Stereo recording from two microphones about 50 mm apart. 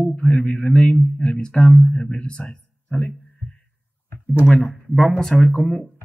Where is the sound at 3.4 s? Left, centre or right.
Left.